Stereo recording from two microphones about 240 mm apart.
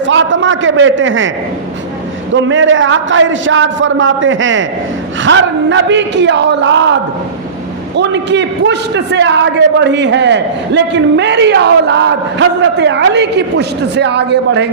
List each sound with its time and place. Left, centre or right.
0.0 s a man's voice: right
2.3 s a man's voice: right
7.9 s a man's voice: right